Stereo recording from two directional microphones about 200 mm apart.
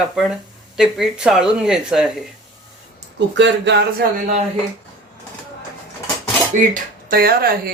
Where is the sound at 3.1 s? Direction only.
60° right (ahead or behind).